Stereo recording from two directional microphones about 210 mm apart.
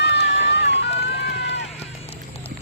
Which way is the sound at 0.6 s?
55° left (ahead or behind).